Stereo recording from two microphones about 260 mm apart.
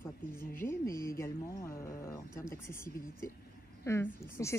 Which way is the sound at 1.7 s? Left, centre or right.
Left.